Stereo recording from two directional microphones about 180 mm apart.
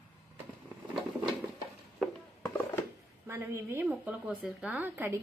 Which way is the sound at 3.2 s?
15° right (ahead or behind).